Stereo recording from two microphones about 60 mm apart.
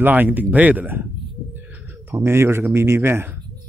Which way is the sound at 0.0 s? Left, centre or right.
Right.